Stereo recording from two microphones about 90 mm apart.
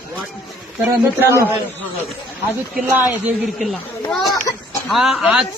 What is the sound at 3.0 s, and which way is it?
Speech, 20° right (ahead or behind).